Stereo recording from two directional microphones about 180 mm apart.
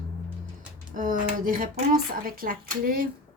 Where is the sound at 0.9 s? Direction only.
45° right (ahead or behind).